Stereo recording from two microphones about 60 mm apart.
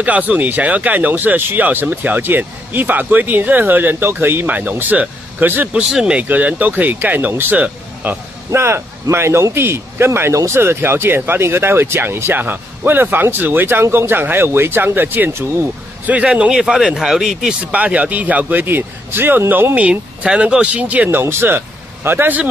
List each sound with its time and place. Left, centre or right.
0.0 s speech: right
5.9 s speech: centre
6.1 s speech: right
8.5 s speech: right
16.3 s speech: centre
17.6 s speech: right
21.1 s speech: right